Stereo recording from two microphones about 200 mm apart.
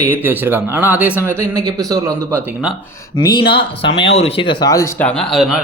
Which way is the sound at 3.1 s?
20° left (ahead or behind).